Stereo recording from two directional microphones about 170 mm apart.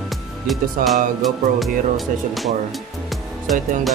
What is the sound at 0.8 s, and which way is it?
Music, 55° right (ahead or behind).